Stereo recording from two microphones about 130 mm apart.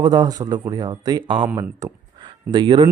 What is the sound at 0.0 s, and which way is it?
A man's voice, 35° right (ahead or behind).